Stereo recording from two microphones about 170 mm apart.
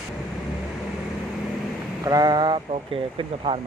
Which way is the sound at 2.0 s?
20° right (ahead or behind).